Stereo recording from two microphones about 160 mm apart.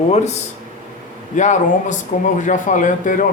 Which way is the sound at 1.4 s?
50° left (ahead or behind).